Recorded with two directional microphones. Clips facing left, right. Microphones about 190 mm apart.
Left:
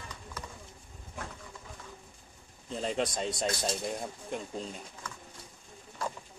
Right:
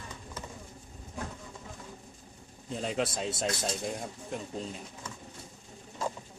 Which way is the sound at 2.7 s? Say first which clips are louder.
Even; centre (ahead or behind).